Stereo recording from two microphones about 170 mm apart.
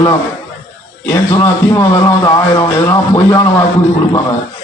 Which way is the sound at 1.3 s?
20° left (ahead or behind).